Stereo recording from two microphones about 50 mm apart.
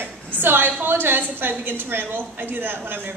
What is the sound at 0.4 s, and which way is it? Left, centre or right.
A woman's voice, right.